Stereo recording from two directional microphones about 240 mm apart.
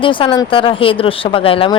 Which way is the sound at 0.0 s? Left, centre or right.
Left.